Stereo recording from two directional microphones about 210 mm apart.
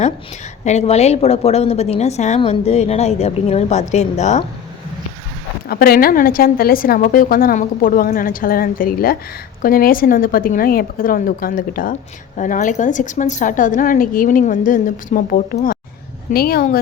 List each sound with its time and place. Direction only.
0.6 s a woman's voice: 35° left (ahead or behind)
5.6 s a woman's voice: 45° left (ahead or behind)